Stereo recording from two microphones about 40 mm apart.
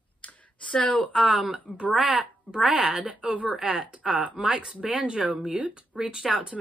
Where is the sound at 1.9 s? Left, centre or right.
Right.